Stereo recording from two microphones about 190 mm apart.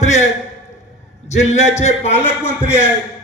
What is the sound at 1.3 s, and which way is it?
Speech, 35° left (ahead or behind).